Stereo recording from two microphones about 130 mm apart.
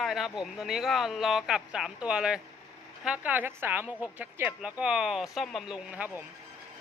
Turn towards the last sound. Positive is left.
turn(degrees=-15)  # may be behind; listen again after turning